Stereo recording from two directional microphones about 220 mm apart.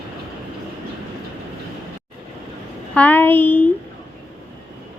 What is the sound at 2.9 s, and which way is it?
Speech, 5° left (ahead or behind).